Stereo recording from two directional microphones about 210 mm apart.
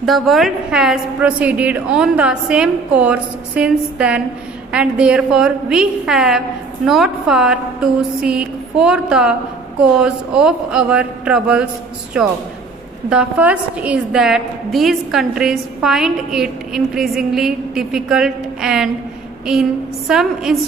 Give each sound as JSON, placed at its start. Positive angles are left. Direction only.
{"t": 0.0, "sound": "a woman's voice", "side_deg": 0}
{"t": 20.1, "sound": "a woman's voice", "side_deg": 0}